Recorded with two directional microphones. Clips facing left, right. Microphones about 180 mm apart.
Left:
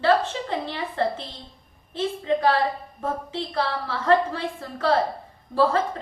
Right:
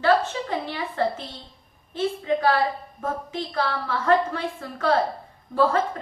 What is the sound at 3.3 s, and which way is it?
A woman's voice, 30° left (ahead or behind).